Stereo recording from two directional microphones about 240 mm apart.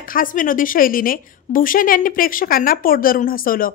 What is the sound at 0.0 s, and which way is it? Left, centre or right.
A woman's voice, left.